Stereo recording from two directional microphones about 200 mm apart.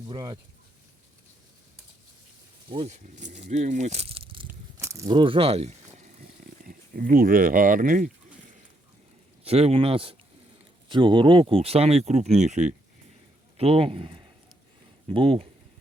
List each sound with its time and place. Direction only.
0.1 s speech: 20° right (ahead or behind)
2.6 s speech: 30° right (ahead or behind)
4.8 s a sound: 15° right (ahead or behind); by 6.2 s 35° right (ahead or behind)
6.7 s speech: 45° right (ahead or behind)
9.4 s speech: 30° right (ahead or behind)